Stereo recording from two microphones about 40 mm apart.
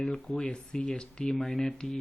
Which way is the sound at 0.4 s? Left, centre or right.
Left.